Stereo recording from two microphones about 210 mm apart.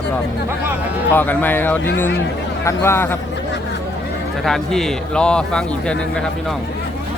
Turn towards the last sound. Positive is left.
turn(degrees=5)  # may be behind; listen again after turning